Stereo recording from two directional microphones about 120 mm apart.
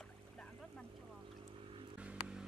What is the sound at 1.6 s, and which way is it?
Vehicle, 45° right (ahead or behind).